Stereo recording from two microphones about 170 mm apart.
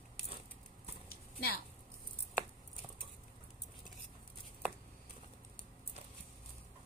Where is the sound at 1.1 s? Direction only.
65° left (ahead or behind).